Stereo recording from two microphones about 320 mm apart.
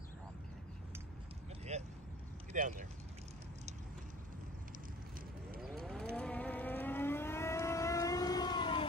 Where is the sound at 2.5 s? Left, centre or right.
Right.